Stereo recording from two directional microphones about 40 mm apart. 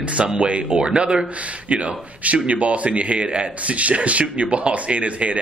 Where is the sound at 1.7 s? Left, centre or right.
Right.